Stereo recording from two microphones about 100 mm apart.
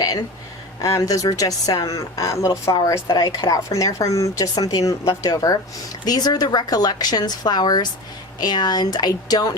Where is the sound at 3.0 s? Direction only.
45° left (ahead or behind).